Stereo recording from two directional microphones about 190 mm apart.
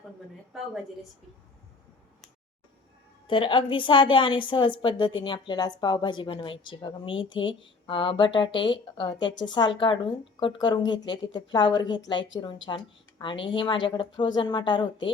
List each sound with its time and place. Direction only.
3.2 s a woman's voice: 25° left (ahead or behind)